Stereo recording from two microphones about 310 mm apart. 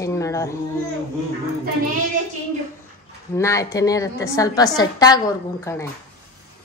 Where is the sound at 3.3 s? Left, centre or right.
Centre.